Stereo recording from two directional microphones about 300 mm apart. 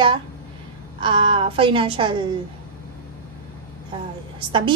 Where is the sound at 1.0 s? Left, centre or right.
Centre.